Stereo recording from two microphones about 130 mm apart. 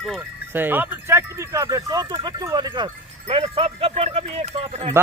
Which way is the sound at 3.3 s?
45° right (ahead or behind).